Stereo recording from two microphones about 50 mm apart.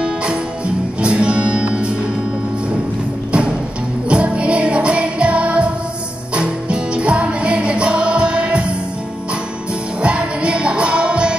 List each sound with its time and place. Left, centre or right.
0.0 s music: right
3.3 s music: right
10.0 s music: right